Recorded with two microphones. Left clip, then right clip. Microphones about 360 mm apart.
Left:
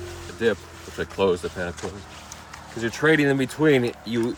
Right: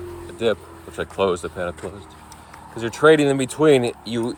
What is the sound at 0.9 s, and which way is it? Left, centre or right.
Speech, centre.